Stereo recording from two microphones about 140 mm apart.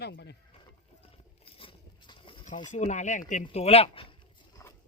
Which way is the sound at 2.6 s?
60° left (ahead or behind).